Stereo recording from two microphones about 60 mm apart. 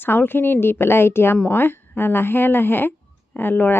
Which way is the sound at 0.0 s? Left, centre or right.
Left.